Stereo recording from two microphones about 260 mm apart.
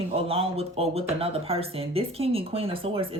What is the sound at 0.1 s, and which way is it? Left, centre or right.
Speech, right.